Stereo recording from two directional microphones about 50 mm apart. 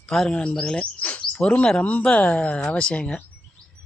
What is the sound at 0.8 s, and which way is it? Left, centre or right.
Speech, left.